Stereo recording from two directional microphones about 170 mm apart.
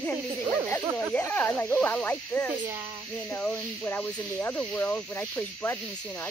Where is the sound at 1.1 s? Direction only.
10° left (ahead or behind).